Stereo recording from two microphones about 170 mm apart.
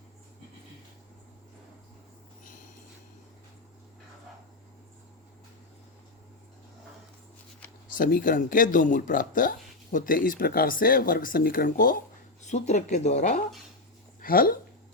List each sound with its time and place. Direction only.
7.9 s speech: 55° left (ahead or behind)
12.4 s speech: 45° left (ahead or behind)
14.2 s speech: 55° left (ahead or behind)